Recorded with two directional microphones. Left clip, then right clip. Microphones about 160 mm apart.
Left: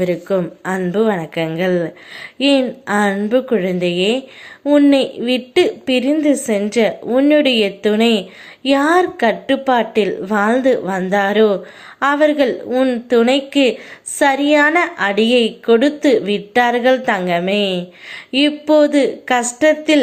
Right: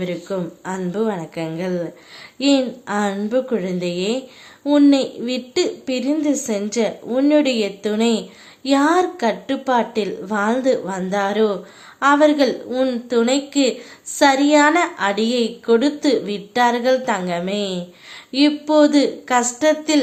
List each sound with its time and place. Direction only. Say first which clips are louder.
0.0 s a woman's voice: left 7 dB; 25° left (ahead or behind)